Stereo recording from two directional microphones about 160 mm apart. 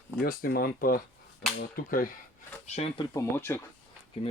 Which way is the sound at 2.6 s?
45° left (ahead or behind).